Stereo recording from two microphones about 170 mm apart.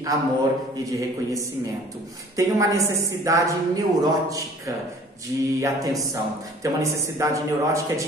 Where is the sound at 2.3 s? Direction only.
20° right (ahead or behind).